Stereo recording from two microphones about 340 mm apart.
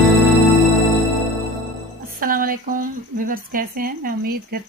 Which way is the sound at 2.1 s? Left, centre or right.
Right.